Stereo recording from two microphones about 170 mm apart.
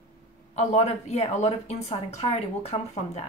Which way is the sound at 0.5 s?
40° left (ahead or behind).